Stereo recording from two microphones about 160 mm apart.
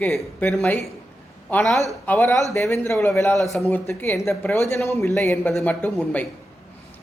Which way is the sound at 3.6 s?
15° left (ahead or behind).